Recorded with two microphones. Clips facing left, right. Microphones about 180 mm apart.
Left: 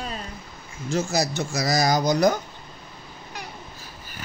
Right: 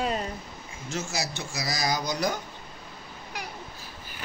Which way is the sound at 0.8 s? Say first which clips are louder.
Left 8 dB; 35° left (ahead or behind).